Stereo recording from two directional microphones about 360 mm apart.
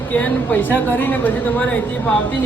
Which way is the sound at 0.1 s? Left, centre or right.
Centre.